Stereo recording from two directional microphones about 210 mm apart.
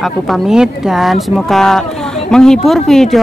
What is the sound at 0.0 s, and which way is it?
Speech, centre (ahead or behind).